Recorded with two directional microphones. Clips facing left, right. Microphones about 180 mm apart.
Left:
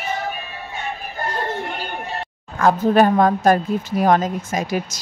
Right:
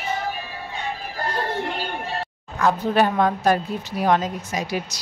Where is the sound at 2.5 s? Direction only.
50° left (ahead or behind).